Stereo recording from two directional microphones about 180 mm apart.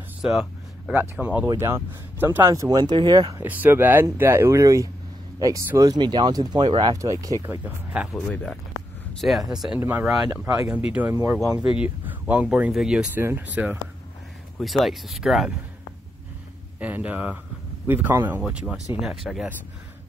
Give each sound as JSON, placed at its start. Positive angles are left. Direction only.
{"t": 0.2, "sound": "speech", "side_deg": 0}
{"t": 3.4, "sound": "speech", "side_deg": -10}
{"t": 8.3, "sound": "speech", "side_deg": 5}
{"t": 9.5, "sound": "speech", "side_deg": -5}
{"t": 14.6, "sound": "speech", "side_deg": 0}
{"t": 16.8, "sound": "speech", "side_deg": -10}